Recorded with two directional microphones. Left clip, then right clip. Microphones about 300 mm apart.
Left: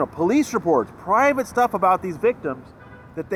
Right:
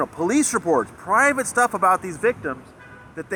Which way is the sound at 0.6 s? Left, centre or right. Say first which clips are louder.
Left 1 dB; centre.